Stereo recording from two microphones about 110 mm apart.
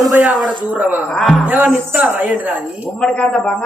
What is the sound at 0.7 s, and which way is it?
Speech, 15° right (ahead or behind).